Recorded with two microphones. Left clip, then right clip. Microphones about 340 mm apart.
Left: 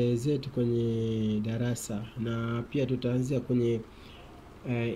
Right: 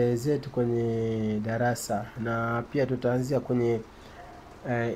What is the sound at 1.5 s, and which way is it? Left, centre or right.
Speech, centre.